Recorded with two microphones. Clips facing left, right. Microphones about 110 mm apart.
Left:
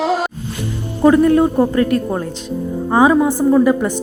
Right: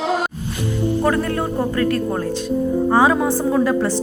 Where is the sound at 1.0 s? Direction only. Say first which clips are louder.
Left 13 dB; 15° left (ahead or behind).